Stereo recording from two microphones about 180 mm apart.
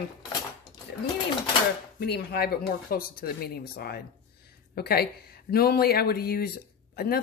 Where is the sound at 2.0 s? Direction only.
60° left (ahead or behind).